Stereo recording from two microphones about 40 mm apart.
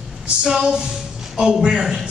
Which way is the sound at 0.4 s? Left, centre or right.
Centre.